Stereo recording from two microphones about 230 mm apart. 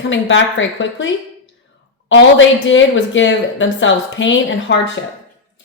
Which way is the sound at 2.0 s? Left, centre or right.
Left.